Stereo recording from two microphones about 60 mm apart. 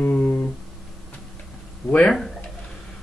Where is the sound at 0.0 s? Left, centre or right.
Left.